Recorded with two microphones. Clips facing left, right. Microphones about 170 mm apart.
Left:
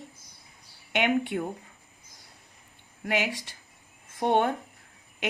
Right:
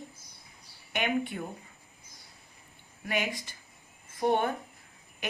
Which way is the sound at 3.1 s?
75° left (ahead or behind).